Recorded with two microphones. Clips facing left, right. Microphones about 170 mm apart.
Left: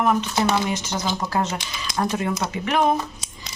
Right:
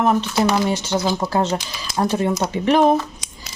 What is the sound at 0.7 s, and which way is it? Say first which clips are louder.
Speech: right 5 dB; 30° right (ahead or behind).